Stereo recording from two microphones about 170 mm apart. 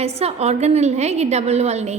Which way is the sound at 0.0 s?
35° right (ahead or behind).